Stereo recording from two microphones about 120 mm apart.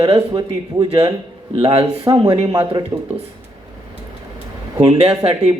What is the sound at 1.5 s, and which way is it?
Speech, 55° right (ahead or behind).